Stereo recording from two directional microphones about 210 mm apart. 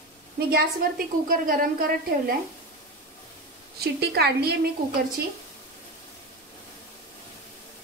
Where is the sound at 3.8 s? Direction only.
50° right (ahead or behind).